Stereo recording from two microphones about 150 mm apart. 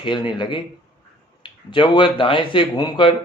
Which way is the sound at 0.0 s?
30° left (ahead or behind).